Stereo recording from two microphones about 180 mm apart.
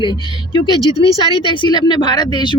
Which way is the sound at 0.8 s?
20° right (ahead or behind).